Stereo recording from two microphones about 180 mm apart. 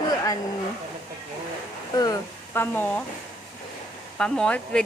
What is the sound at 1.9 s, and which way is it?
Speech, 20° left (ahead or behind).